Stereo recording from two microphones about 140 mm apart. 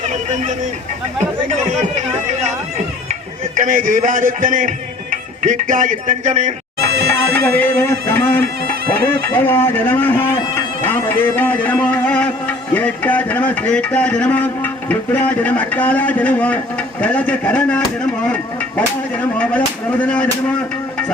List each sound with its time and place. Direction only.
3.5 s a man's voice: 70° right (ahead or behind)
7.1 s speech: 15° left (ahead or behind)
19.4 s speech: 10° left (ahead or behind)